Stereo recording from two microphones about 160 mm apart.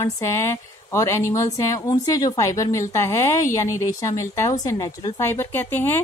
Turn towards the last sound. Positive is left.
turn(degrees=15)  # may be behind; listen again after turning